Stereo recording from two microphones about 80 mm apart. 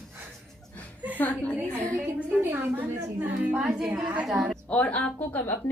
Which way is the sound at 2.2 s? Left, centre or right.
Right.